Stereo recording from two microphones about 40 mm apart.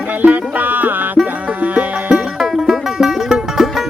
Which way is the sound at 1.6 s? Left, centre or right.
Right.